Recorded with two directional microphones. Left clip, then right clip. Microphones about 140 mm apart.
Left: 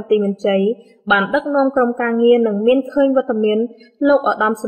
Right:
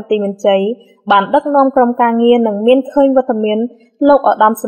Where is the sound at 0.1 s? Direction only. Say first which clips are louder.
Right 4 dB; 30° right (ahead or behind).